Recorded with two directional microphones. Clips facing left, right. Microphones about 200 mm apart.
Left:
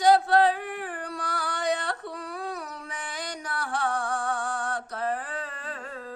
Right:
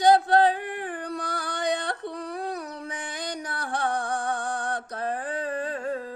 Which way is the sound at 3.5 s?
20° right (ahead or behind).